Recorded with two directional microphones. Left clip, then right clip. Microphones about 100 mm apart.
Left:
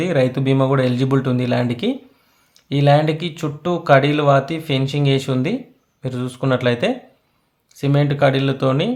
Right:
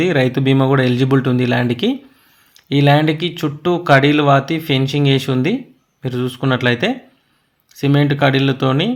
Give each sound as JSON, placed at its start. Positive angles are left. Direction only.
{"t": 0.0, "sound": "speech", "side_deg": -15}